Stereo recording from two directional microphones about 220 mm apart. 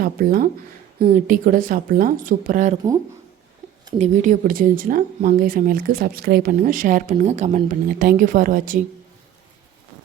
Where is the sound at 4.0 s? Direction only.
35° right (ahead or behind).